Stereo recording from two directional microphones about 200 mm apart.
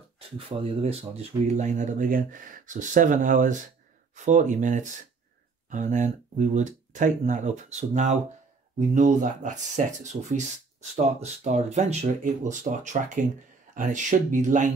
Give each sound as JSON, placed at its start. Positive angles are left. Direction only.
{"t": 0.5, "sound": "speech", "side_deg": -30}